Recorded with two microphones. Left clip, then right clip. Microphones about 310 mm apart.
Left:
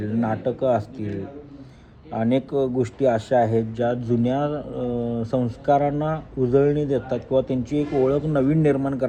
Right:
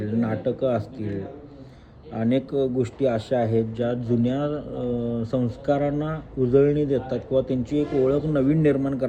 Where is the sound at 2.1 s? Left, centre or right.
Centre.